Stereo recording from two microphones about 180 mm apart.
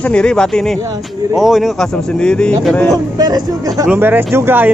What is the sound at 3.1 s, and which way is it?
Speech, 20° right (ahead or behind).